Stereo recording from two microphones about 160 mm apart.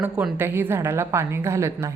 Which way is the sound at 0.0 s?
15° right (ahead or behind).